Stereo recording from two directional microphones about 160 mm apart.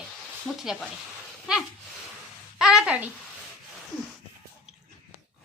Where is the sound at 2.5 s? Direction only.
5° right (ahead or behind).